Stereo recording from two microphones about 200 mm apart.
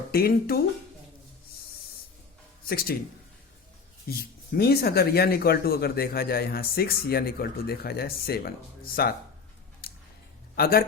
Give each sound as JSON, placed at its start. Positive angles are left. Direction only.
{"t": 0.1, "sound": "speech", "side_deg": 50}
{"t": 2.6, "sound": "speech", "side_deg": 50}
{"t": 4.5, "sound": "speech", "side_deg": 50}
{"t": 10.5, "sound": "speech", "side_deg": 50}